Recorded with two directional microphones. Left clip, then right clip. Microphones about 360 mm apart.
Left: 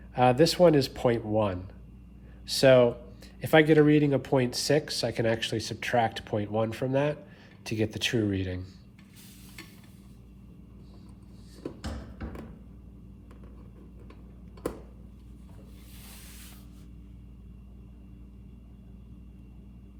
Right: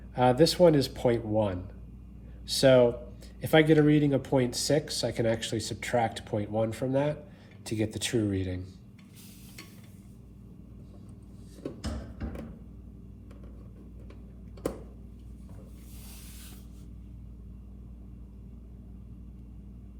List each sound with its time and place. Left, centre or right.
0.1 s speech: centre